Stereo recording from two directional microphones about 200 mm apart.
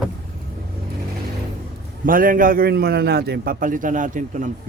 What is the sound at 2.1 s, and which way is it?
A man's voice, 45° right (ahead or behind).